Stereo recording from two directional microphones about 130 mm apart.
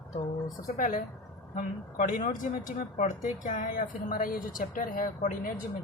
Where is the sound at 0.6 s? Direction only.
85° left.